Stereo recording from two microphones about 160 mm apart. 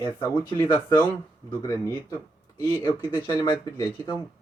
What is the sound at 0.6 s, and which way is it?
Speech, 10° left (ahead or behind).